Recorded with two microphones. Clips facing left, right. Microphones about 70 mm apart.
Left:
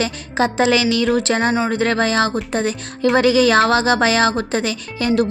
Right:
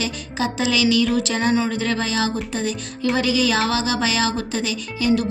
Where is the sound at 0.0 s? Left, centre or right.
Left.